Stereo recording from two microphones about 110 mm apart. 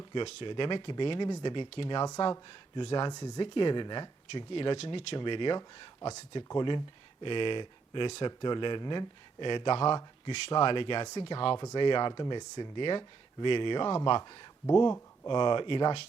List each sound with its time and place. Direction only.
0.1 s speech: 50° left (ahead or behind)
3.1 s speech: 35° left (ahead or behind); by 16.0 s 55° left (ahead or behind)